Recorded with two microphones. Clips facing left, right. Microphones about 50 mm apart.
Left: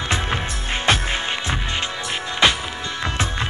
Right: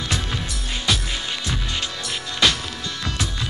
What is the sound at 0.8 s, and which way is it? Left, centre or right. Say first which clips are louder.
Music: left 5 dB; left.